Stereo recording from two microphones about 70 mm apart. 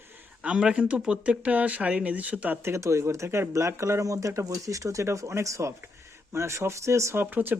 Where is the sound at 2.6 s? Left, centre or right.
Right.